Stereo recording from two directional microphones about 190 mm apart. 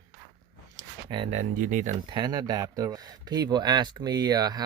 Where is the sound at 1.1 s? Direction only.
30° right (ahead or behind).